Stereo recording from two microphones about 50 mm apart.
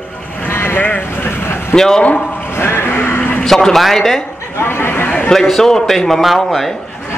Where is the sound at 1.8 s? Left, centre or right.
Centre.